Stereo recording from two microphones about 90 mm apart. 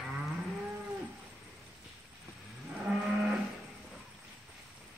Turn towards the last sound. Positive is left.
turn(degrees=-15)  # may be behind; listen again after turning